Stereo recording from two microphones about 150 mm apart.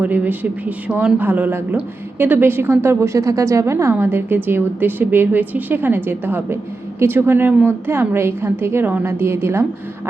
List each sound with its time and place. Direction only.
0.0 s speech: 10° right (ahead or behind)